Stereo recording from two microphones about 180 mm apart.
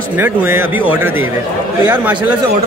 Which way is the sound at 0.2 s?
10° right (ahead or behind).